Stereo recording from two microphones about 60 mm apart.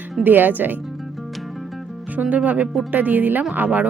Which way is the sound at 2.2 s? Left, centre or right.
Right.